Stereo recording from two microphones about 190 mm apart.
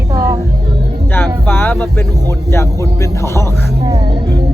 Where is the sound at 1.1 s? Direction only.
10° left (ahead or behind).